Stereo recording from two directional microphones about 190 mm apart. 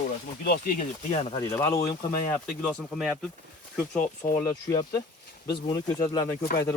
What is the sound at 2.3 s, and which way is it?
Speech, 5° left (ahead or behind).